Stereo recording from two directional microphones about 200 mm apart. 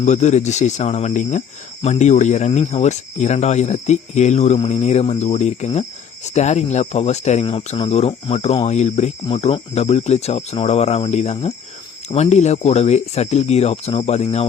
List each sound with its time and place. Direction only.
0.0 s speech: 35° left (ahead or behind)